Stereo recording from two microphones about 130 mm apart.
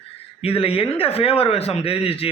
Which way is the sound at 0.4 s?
45° left (ahead or behind).